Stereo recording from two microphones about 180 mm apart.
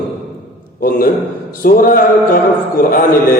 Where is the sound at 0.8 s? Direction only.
55° left (ahead or behind).